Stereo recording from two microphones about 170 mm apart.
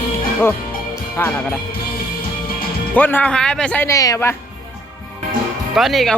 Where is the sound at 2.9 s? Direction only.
10° left (ahead or behind).